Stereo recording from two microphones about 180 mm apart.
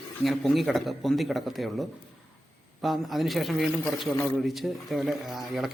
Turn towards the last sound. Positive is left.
turn(degrees=0)  # may be behind; listen again after turning